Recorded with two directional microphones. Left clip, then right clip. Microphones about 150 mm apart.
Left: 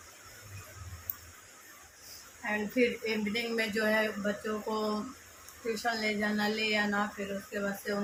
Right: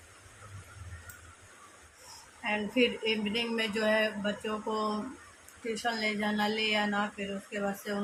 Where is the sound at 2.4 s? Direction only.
20° right (ahead or behind).